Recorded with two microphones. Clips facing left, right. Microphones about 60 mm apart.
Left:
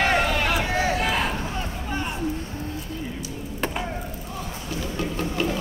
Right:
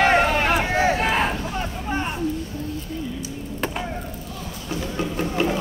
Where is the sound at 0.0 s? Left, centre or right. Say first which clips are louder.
Right 4 dB; right.